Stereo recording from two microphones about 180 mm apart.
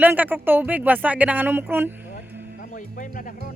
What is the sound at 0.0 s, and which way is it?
Speech, 10° right (ahead or behind).